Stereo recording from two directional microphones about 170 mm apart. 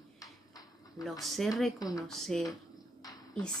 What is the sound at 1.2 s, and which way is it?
Speech, centre (ahead or behind).